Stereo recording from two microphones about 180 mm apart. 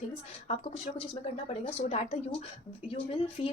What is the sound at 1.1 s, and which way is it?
A woman's voice, 35° left (ahead or behind).